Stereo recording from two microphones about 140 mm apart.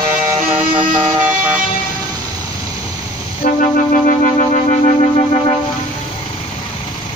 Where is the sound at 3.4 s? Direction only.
70° left (ahead or behind).